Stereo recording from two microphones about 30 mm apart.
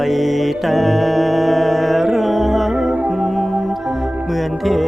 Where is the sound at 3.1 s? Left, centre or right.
Centre.